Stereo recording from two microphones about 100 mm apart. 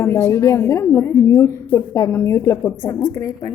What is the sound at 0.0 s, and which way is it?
A woman's voice, 30° left (ahead or behind).